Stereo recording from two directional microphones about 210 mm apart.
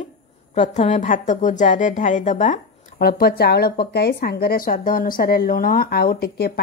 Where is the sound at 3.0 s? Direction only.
45° left (ahead or behind).